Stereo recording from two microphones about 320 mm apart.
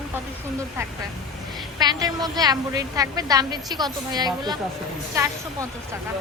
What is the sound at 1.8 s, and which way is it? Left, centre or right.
A woman's voice, centre.